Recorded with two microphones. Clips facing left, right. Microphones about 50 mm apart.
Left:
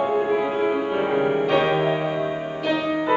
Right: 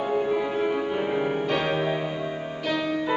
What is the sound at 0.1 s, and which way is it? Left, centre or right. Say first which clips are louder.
Music: left 3 dB; centre.